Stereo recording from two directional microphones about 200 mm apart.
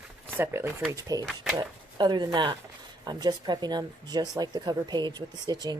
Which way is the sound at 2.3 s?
25° right (ahead or behind).